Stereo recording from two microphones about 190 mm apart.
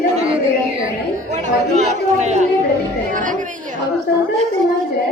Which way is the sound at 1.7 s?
40° right (ahead or behind).